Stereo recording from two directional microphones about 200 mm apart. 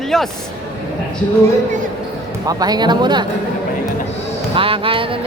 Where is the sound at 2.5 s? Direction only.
20° right (ahead or behind).